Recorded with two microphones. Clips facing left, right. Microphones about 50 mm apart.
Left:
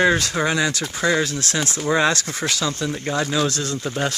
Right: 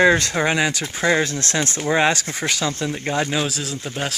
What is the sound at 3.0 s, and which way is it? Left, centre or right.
Speech, right.